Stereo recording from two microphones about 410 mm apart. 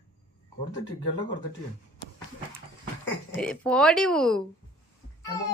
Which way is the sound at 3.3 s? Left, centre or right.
Centre.